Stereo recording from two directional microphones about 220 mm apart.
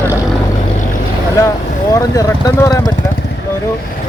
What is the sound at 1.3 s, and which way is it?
Speech, 15° left (ahead or behind).